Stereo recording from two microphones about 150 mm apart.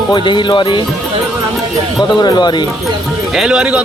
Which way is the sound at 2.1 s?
30° left (ahead or behind).